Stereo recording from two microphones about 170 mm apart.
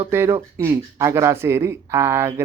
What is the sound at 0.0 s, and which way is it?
Speech, 15° right (ahead or behind).